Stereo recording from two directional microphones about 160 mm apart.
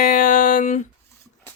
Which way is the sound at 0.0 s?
55° left (ahead or behind).